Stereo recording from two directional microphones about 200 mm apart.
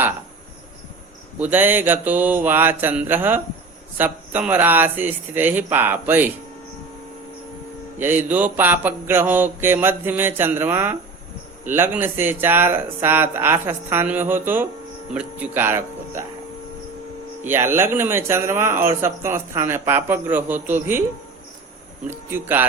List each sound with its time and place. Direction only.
1.4 s speech: 10° right (ahead or behind)
7.9 s speech: 10° right (ahead or behind)
17.5 s speech: 10° right (ahead or behind)
22.3 s speech: 10° right (ahead or behind)